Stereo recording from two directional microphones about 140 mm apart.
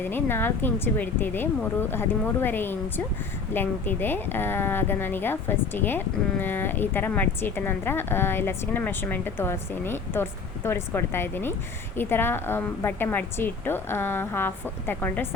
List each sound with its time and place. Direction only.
0.0 s a woman's voice: 15° left (ahead or behind)